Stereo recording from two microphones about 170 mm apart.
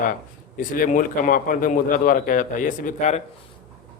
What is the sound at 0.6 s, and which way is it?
A man's voice, 50° left (ahead or behind).